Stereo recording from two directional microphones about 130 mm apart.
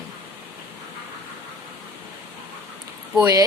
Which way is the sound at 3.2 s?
30° right (ahead or behind).